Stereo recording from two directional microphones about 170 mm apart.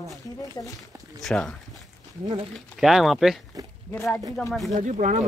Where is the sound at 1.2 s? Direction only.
Centre (ahead or behind).